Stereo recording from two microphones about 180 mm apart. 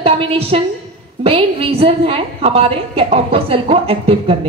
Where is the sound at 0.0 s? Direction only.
30° right (ahead or behind).